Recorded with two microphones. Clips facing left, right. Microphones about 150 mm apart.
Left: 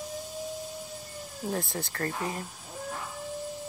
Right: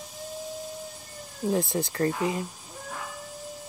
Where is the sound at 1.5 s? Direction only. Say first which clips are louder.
Right 7 dB; 20° right (ahead or behind).